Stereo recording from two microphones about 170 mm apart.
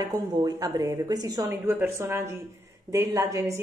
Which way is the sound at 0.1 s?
20° right (ahead or behind).